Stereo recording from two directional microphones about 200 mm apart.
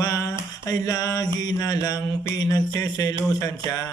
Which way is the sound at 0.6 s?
20° left (ahead or behind).